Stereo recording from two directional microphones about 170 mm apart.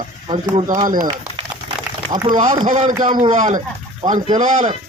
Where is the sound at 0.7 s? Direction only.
50° right (ahead or behind).